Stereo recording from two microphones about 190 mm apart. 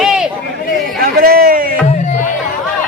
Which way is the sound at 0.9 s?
50° right (ahead or behind).